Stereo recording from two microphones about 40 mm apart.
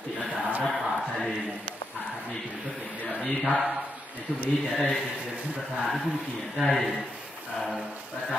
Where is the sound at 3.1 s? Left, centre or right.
Centre.